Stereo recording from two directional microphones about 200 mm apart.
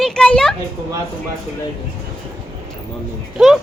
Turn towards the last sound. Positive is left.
turn(degrees=0)  # may be behind; listen again after turning